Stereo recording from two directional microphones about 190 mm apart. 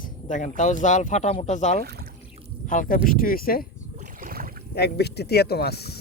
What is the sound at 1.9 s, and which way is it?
Speech, 55° right (ahead or behind).